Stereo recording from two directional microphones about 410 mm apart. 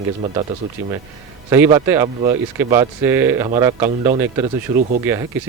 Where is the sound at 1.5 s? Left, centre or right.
Centre.